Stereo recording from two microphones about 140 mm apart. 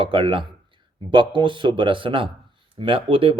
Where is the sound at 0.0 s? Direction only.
40° right (ahead or behind).